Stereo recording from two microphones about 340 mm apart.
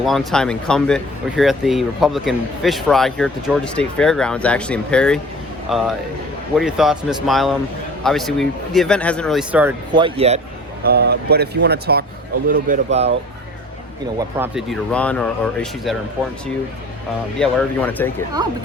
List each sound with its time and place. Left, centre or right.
0.0 s speech: centre
10.8 s speech: right
14.2 s speech: centre
17.4 s speech: centre